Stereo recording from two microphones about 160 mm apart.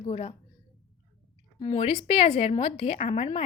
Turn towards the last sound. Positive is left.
turn(degrees=40)  # may be behind; listen again after turning